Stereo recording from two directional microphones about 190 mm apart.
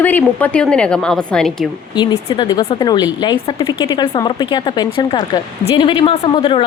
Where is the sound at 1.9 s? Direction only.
20° left (ahead or behind).